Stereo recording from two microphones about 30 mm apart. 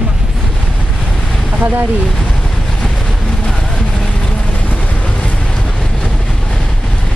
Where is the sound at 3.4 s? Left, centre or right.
Left.